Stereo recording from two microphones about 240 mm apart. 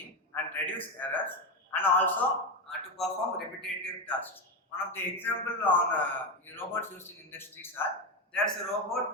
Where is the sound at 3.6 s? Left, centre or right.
Centre.